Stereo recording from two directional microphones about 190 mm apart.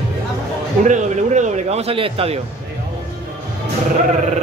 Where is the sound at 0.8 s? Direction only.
40° right (ahead or behind).